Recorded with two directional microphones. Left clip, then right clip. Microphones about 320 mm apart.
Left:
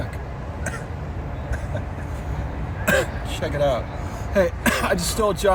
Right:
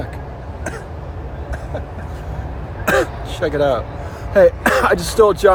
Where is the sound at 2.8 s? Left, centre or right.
Centre.